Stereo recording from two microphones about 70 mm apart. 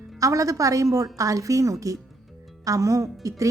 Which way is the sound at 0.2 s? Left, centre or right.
Right.